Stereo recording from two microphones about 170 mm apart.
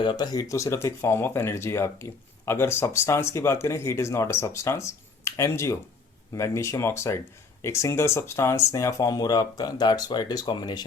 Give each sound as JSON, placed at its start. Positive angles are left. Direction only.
{"t": 0.0, "sound": "speech", "side_deg": 25}